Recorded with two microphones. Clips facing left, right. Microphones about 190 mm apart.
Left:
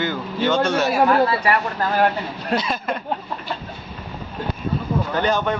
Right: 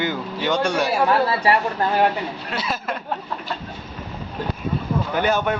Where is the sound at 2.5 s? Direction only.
5° right (ahead or behind).